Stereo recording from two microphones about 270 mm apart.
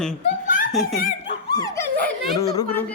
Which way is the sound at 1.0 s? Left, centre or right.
Left.